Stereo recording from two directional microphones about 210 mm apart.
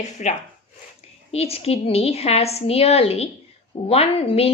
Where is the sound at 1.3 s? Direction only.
30° left (ahead or behind).